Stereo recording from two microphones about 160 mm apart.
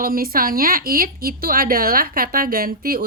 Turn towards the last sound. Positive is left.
turn(degrees=-65)  # may be behind; listen again after turning